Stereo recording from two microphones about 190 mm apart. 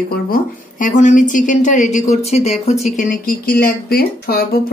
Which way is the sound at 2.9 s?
50° left (ahead or behind).